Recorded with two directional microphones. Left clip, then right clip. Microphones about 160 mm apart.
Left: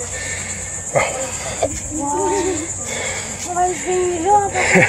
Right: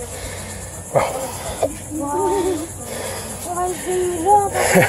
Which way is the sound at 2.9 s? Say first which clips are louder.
Left 3 dB; 5° right (ahead or behind).